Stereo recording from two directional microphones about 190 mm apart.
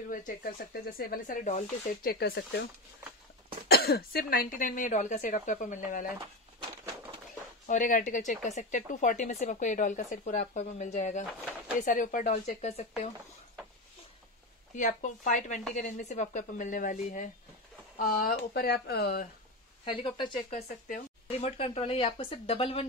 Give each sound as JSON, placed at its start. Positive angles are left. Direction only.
{"t": 0.1, "sound": "speech", "side_deg": 50}
{"t": 2.0, "sound": "speech", "side_deg": 55}
{"t": 3.6, "sound": "speech", "side_deg": 55}
{"t": 6.1, "sound": "a sound", "side_deg": -25}
{"t": 7.6, "sound": "speech", "side_deg": 45}
{"t": 14.8, "sound": "speech", "side_deg": 40}
{"t": 19.8, "sound": "speech", "side_deg": 25}